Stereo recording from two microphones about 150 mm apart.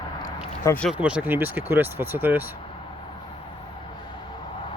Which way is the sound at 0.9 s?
10° right (ahead or behind).